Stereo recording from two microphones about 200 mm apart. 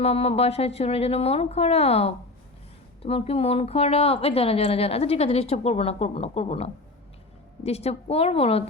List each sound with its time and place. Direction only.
0.0 s speech: 30° left (ahead or behind)